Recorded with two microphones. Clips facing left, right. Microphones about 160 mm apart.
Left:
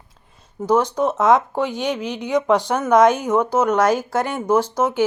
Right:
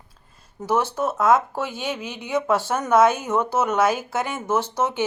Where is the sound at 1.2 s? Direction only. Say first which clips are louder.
Left 2 dB; centre (ahead or behind).